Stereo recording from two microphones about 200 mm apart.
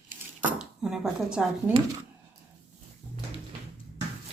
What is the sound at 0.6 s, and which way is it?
Speech, centre (ahead or behind).